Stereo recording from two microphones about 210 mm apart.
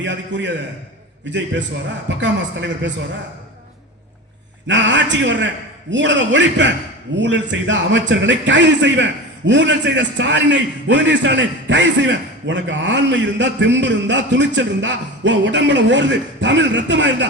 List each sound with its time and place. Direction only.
0.0 s a man's voice: 60° right (ahead or behind)
2.0 s a man's voice: 60° right (ahead or behind)
4.7 s a man's voice: 60° right (ahead or behind)